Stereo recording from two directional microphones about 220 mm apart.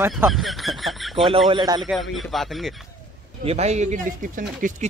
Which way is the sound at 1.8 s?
Centre (ahead or behind).